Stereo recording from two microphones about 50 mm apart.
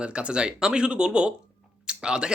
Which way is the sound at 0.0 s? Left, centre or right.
Right.